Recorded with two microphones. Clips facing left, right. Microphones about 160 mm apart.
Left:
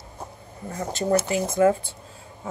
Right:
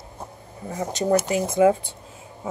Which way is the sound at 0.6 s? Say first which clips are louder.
Right 2 dB; 10° right (ahead or behind).